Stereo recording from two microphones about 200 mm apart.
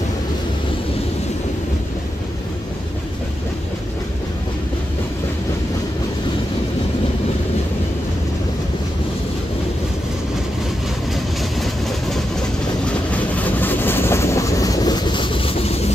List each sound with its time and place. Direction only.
13.1 s vehicle: 5° left (ahead or behind); by 15.9 s 30° left (ahead or behind)